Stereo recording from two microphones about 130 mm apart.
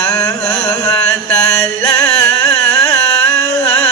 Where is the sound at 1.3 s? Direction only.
25° left (ahead or behind).